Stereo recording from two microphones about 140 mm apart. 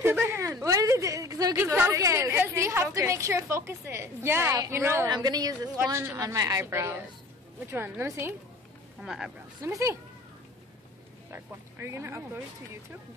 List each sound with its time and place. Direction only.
0.0 s a woman's voice: 15° right (ahead or behind)
5.1 s a woman's voice: 30° right (ahead or behind)
9.0 s speech: 5° right (ahead or behind)
9.7 s a woman's voice: 20° right (ahead or behind)
11.2 s a woman's voice: 20° right (ahead or behind)